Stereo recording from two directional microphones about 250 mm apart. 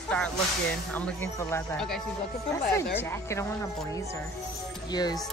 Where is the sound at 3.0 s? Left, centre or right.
Centre.